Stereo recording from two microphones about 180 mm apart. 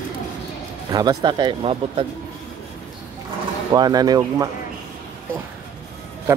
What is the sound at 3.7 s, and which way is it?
Speech, 20° right (ahead or behind).